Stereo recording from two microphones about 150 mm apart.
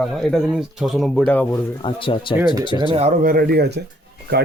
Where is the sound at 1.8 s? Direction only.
35° left (ahead or behind).